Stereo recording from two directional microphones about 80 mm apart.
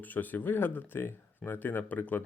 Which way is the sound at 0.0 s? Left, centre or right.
Left.